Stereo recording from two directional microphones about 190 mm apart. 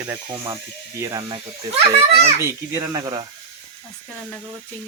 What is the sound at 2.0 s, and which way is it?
Speech, 30° right (ahead or behind).